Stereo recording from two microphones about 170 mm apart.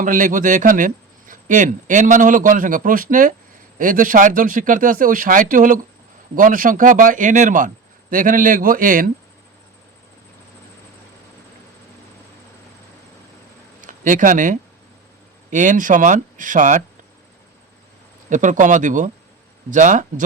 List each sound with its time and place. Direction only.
0.0 s speech: 50° right (ahead or behind)
13.8 s speech: 50° right (ahead or behind)
18.3 s speech: 50° right (ahead or behind)